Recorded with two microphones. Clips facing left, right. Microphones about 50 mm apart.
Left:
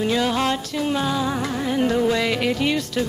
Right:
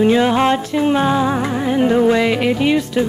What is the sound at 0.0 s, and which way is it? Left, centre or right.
Music, right.